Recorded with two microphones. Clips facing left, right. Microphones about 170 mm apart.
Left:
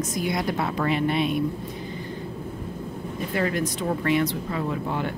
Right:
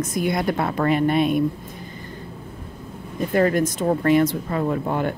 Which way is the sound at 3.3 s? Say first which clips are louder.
Right 7 dB; 45° right (ahead or behind).